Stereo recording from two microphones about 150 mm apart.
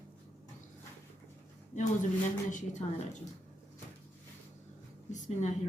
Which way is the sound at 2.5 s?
55° left (ahead or behind).